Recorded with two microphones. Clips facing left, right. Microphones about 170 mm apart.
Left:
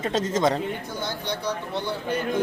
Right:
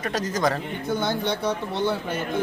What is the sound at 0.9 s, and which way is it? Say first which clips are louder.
Speech: right 6 dB; 55° right (ahead or behind).